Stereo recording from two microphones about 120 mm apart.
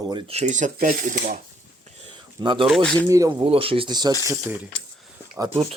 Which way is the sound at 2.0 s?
45° right (ahead or behind).